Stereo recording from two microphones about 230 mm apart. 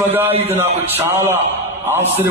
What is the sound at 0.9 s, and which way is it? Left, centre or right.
A man's voice, centre.